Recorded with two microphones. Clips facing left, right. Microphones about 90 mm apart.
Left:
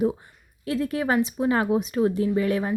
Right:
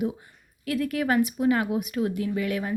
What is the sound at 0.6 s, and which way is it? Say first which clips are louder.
A woman's voice: left 1 dB; 25° left (ahead or behind).